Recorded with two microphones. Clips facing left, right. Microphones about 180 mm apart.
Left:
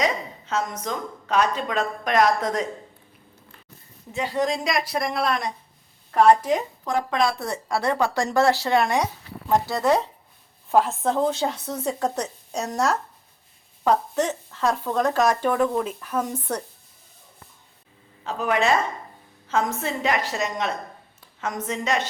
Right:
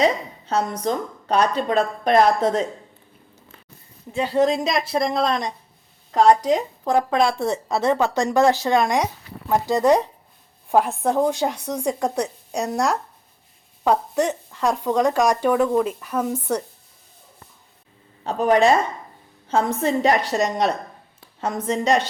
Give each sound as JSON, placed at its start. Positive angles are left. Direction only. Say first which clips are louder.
{"t": 0.0, "sound": "a woman's voice", "louder": "right 5 dB", "side_deg": -35}
{"t": 4.4, "sound": "speech", "louder": "right 4 dB", "side_deg": -20}
{"t": 6.8, "sound": "speech", "louder": "right 5 dB", "side_deg": -30}
{"t": 18.2, "sound": "a woman's voice", "louder": "right 6 dB", "side_deg": -35}